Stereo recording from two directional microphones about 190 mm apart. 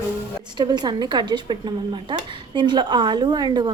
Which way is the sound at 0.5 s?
25° right (ahead or behind).